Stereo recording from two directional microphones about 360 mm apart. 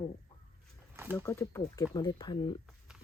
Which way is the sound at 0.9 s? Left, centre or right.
Centre.